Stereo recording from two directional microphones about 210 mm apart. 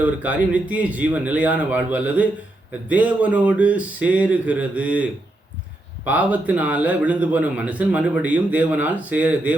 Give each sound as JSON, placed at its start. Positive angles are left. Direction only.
{"t": 0.0, "sound": "a man's voice", "side_deg": -5}
{"t": 6.1, "sound": "a man's voice", "side_deg": -5}